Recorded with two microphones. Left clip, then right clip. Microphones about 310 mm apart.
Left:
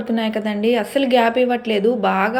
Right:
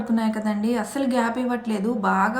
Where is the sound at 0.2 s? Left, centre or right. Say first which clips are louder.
Left 5 dB; centre.